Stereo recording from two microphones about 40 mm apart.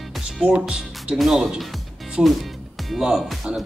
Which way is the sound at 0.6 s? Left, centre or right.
Right.